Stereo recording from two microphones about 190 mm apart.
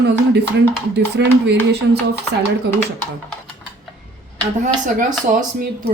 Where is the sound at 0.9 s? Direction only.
60° right (ahead or behind).